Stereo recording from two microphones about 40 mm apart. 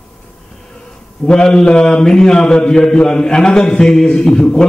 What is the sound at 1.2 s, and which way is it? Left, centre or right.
A man's voice, left.